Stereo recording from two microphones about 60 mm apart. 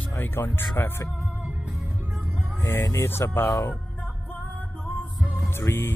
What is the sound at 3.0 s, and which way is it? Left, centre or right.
Speech, left.